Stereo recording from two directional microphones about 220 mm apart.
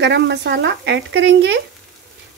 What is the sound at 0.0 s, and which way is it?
A child's voice, 50° right (ahead or behind).